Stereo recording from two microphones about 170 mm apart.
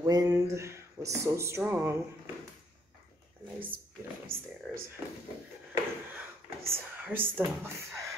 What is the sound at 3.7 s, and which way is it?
Drawer open or close, 60° right (ahead or behind).